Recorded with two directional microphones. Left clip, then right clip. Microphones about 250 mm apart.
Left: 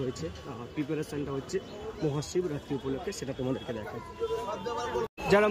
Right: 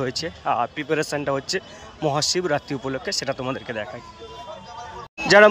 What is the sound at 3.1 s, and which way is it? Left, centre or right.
Speech, centre.